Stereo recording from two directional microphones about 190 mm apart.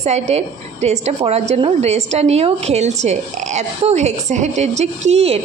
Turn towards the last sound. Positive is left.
turn(degrees=-35)  # may be behind; listen again after turning